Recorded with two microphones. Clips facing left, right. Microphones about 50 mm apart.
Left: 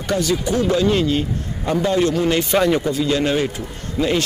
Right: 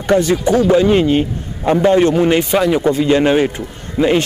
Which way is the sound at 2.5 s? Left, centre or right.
Centre.